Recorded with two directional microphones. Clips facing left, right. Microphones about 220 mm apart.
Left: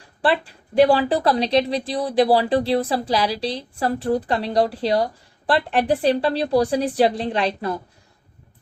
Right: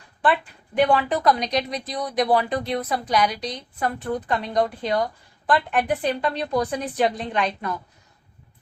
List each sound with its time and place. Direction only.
0.2 s a woman's voice: 30° left (ahead or behind)